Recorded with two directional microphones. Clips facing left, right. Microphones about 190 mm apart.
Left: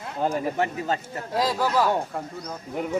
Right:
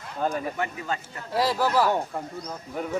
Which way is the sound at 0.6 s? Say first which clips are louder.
Left 4 dB; 35° left (ahead or behind).